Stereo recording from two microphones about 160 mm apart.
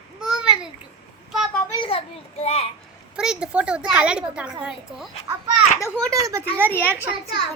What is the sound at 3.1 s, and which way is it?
A woman's voice, 5° right (ahead or behind).